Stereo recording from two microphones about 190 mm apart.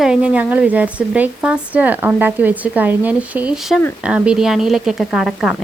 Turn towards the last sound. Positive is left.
turn(degrees=0)  # may be behind; listen again after turning